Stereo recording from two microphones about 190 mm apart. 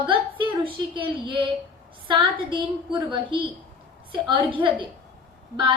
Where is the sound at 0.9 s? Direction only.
25° right (ahead or behind).